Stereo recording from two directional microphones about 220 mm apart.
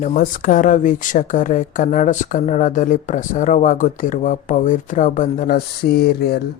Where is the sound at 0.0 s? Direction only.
40° left (ahead or behind).